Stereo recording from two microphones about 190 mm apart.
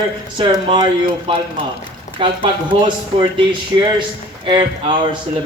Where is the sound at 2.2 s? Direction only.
25° right (ahead or behind).